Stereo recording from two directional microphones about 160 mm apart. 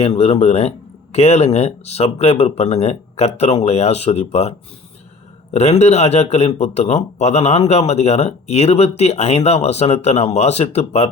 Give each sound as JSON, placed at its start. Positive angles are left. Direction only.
{"t": 0.0, "sound": "a man's voice", "side_deg": 40}
{"t": 5.5, "sound": "a man's voice", "side_deg": 40}